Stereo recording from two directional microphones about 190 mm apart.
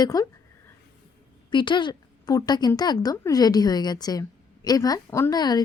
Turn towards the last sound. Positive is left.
turn(degrees=20)  # may be behind; listen again after turning